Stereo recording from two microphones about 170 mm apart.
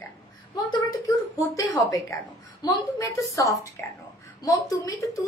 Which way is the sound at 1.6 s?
20° left (ahead or behind).